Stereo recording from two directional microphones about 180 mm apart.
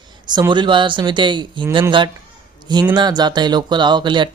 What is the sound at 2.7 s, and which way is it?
Speech, 25° right (ahead or behind).